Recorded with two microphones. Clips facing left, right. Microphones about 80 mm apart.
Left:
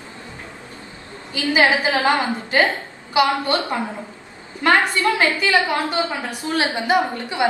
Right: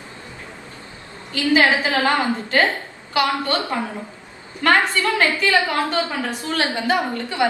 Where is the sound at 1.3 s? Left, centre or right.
Centre.